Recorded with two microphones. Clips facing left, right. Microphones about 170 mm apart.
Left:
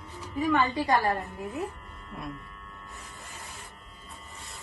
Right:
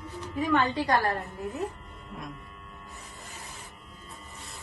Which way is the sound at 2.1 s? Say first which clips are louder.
Left 1 dB; centre (ahead or behind).